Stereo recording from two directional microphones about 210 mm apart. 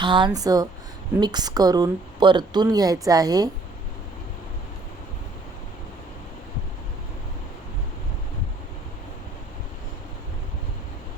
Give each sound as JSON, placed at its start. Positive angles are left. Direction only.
{"t": 0.0, "sound": "a woman's voice", "side_deg": -20}